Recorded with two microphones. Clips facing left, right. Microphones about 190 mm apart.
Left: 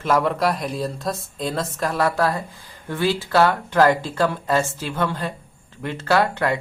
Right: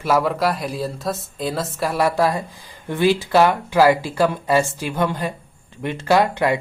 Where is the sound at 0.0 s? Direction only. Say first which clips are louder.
Right 1 dB; 5° right (ahead or behind).